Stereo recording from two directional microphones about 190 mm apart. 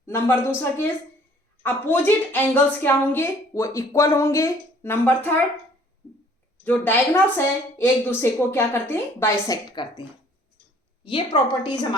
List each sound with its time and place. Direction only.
0.0 s a woman's voice: 10° left (ahead or behind)
6.7 s a woman's voice: 10° left (ahead or behind)